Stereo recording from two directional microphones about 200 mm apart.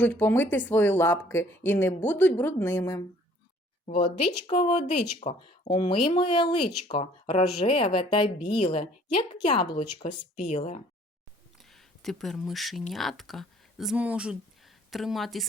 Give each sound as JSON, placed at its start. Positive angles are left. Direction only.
{"t": 0.0, "sound": "speech", "side_deg": 10}
{"t": 3.8, "sound": "speech", "side_deg": 35}
{"t": 5.6, "sound": "a woman's voice", "side_deg": 25}
{"t": 11.7, "sound": "a woman's voice", "side_deg": 0}